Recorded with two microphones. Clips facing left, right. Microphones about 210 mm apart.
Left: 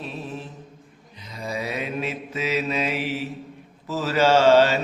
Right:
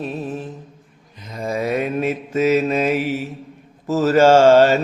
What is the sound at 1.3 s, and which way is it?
Mantra, 50° right (ahead or behind).